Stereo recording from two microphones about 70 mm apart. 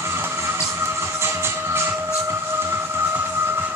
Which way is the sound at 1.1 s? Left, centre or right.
Right.